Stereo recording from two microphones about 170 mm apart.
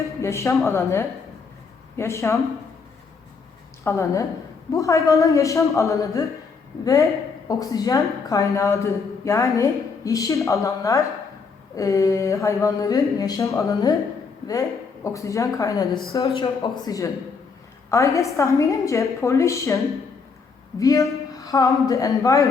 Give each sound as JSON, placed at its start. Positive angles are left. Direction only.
{"t": 0.2, "sound": "a woman's voice", "side_deg": 15}
{"t": 3.8, "sound": "a woman's voice", "side_deg": 15}
{"t": 15.0, "sound": "a woman's voice", "side_deg": 20}